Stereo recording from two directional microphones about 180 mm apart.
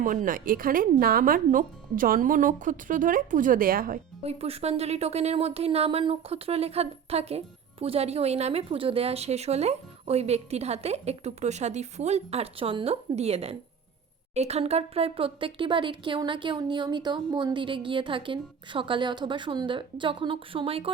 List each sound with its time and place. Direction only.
0.0 s speech: 50° right (ahead or behind)
4.2 s speech: 35° right (ahead or behind)